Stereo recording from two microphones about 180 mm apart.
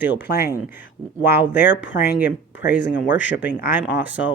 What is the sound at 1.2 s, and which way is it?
Speech, 10° right (ahead or behind).